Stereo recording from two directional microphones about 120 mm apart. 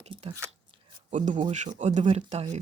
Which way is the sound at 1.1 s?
90° right.